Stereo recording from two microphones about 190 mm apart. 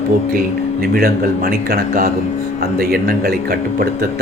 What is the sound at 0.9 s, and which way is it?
Speech, 50° right (ahead or behind).